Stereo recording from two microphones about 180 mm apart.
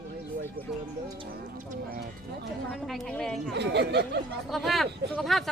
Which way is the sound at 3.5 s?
70° right (ahead or behind).